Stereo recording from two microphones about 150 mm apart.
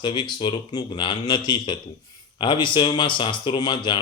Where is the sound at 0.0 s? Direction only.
30° left (ahead or behind).